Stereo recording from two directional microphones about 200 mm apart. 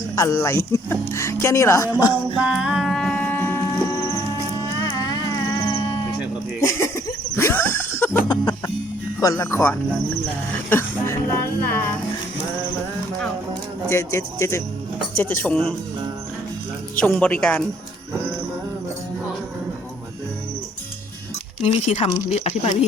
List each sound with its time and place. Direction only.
0.2 s speech: 15° left (ahead or behind)
2.4 s a sound: 5° right (ahead or behind); by 4.1 s 15° left (ahead or behind)
4.8 s music: 20° left (ahead or behind)
6.6 s a sound: 15° left (ahead or behind)
9.2 s speech: 15° left (ahead or behind)
13.5 s speech: 15° left (ahead or behind)
17.0 s speech: 5° left (ahead or behind)
21.6 s speech: 30° left (ahead or behind)